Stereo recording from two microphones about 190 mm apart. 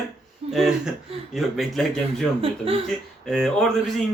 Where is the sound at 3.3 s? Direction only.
Centre (ahead or behind).